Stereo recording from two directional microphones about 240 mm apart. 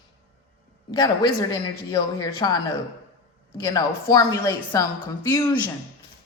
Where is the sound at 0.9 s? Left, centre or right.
Centre.